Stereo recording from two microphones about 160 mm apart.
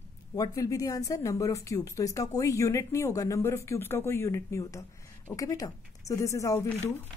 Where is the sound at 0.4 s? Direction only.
20° left (ahead or behind).